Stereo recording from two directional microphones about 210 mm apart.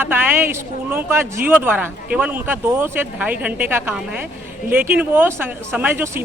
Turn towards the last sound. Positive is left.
turn(degrees=-10)  # may be behind; listen again after turning